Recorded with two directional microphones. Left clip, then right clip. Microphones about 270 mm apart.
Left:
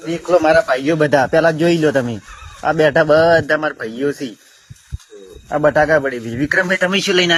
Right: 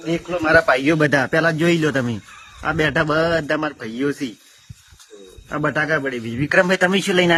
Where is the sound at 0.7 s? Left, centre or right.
Right.